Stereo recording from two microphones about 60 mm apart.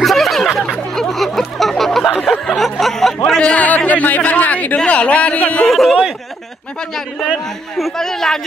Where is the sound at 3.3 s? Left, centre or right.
Left.